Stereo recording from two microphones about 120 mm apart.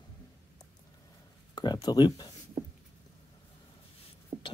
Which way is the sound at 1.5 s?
35° left (ahead or behind).